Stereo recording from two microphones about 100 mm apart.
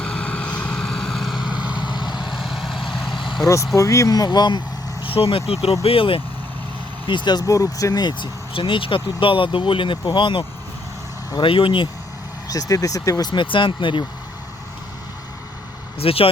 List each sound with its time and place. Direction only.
0.0 s vehicle: 10° left (ahead or behind); by 1.8 s 10° right (ahead or behind)
1.8 s vehicle: 50° left (ahead or behind)
2.3 s vehicle: centre (ahead or behind)
3.1 s vehicle: 55° left (ahead or behind)
3.8 s speech: 30° left (ahead or behind)
5.0 s speech: 70° left (ahead or behind)
5.8 s speech: 65° left (ahead or behind)
7.1 s speech: 50° left (ahead or behind)
8.5 s speech: 60° left (ahead or behind)
11.4 s speech: 65° left (ahead or behind)
12.5 s speech: 35° left (ahead or behind)
13.3 s speech: 55° left (ahead or behind)
16.0 s speech: 70° left (ahead or behind)